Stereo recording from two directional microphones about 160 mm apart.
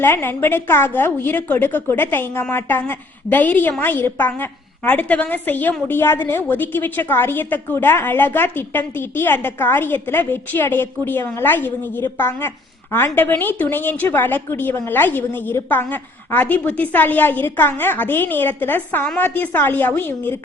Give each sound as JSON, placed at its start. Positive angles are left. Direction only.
{"t": 0.0, "sound": "a woman's voice", "side_deg": 15}